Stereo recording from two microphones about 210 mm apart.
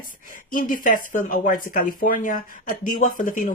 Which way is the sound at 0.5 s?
40° left (ahead or behind).